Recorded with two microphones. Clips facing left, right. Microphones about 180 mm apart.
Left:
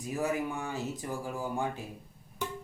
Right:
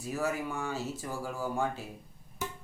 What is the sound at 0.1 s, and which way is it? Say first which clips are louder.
Speech: left 1 dB; 15° left (ahead or behind).